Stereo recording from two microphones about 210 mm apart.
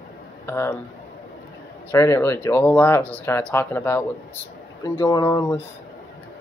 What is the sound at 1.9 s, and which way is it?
Speech, 15° left (ahead or behind).